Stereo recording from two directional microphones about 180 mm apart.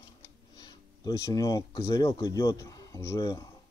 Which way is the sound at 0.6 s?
25° left (ahead or behind).